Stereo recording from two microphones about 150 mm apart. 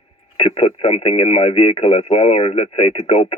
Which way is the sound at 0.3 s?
35° left (ahead or behind).